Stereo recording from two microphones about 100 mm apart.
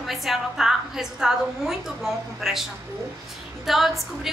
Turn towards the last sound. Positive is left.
turn(degrees=0)  # may be behind; listen again after turning